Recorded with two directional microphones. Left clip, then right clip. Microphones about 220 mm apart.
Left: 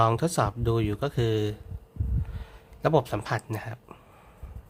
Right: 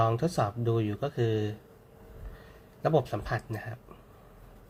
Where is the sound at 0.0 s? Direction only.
25° left (ahead or behind).